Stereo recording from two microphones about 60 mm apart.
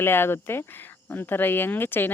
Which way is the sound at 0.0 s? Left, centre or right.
Left.